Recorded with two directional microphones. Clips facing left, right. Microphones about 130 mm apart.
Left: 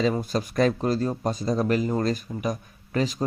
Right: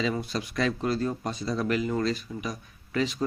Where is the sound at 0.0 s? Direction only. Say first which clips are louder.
Left 5 dB; 45° left (ahead or behind).